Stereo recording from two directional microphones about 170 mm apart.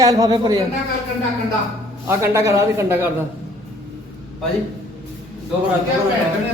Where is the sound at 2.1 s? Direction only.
15° right (ahead or behind).